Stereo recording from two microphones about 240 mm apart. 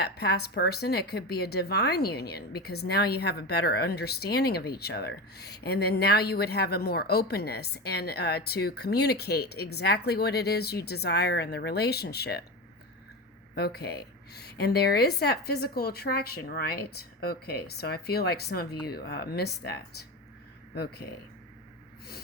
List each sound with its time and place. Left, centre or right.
0.0 s speech: left
13.6 s speech: left